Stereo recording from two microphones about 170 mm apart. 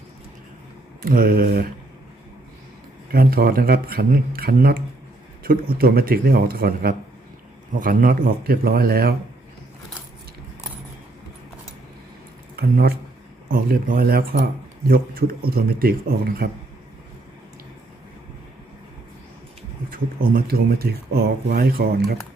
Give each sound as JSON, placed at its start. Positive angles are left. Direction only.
{"t": 1.0, "sound": "speech", "side_deg": -60}
{"t": 3.1, "sound": "speech", "side_deg": -60}
{"t": 12.5, "sound": "speech", "side_deg": -65}
{"t": 19.9, "sound": "speech", "side_deg": -60}